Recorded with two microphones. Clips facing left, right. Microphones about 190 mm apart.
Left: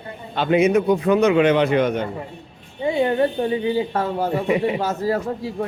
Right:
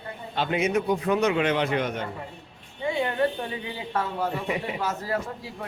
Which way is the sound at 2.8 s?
25° left (ahead or behind).